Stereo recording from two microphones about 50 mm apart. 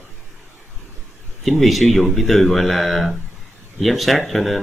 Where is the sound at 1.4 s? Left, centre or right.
Centre.